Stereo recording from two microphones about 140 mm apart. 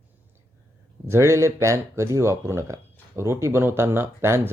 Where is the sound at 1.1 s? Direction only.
20° right (ahead or behind).